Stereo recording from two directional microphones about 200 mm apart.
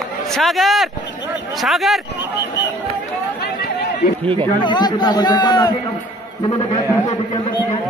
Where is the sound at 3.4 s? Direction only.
50° left (ahead or behind).